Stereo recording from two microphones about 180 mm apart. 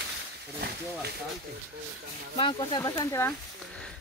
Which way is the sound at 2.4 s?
25° left (ahead or behind).